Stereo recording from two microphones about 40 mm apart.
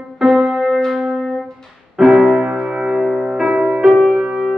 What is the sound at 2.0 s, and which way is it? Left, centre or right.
Music, centre.